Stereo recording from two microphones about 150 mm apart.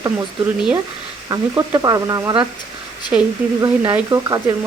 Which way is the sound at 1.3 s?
25° right (ahead or behind).